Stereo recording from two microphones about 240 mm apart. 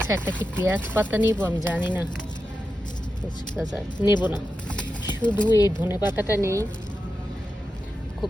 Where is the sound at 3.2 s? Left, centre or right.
Centre.